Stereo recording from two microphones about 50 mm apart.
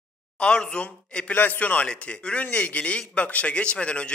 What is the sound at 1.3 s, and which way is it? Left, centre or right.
A man's voice, left.